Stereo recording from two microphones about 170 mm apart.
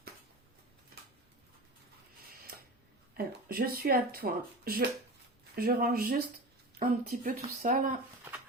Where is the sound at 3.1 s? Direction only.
60° right (ahead or behind).